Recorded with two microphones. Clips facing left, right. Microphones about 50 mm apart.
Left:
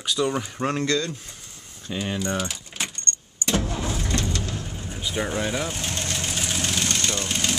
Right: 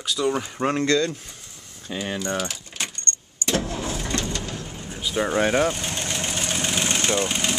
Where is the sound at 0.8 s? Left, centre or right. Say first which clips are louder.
Right 4 dB; right.